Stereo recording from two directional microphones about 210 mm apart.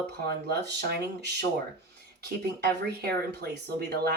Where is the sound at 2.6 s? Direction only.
50° right (ahead or behind).